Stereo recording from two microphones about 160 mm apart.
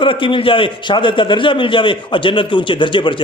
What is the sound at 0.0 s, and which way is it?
A man's voice, 30° left (ahead or behind).